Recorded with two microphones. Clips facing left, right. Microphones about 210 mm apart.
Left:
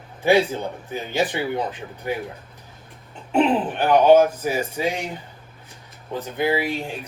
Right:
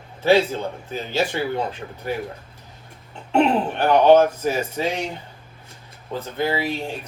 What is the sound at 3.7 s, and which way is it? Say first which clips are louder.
Speech: even; 10° left (ahead or behind).